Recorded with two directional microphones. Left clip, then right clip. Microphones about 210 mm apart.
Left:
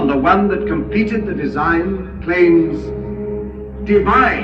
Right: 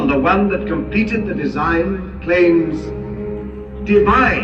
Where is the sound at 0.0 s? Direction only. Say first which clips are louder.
Left 1 dB; 25° left (ahead or behind).